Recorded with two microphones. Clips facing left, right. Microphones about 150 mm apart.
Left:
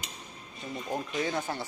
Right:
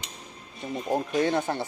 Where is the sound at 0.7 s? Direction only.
30° right (ahead or behind).